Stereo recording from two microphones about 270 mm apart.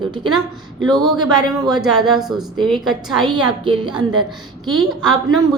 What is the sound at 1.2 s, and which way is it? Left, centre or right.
Speech, centre.